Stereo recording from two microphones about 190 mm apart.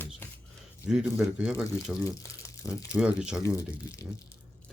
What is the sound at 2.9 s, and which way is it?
Speech, 5° right (ahead or behind).